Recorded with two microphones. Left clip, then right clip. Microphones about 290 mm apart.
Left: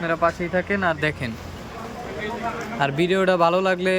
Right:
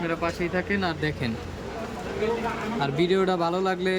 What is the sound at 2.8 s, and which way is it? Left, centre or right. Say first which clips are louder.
Speech: left 3 dB; centre.